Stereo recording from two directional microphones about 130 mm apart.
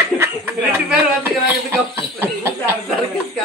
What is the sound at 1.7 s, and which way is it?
Chuckle, 20° right (ahead or behind).